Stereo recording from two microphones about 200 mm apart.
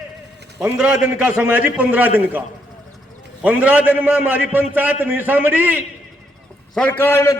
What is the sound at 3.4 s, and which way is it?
A man's voice, 5° right (ahead or behind).